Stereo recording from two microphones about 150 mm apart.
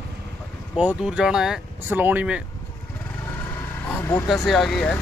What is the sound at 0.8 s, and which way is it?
Speech, 10° right (ahead or behind).